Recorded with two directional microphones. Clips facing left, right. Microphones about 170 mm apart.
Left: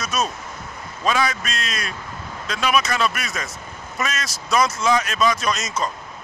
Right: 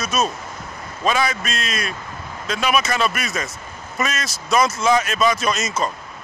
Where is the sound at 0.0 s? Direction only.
5° right (ahead or behind).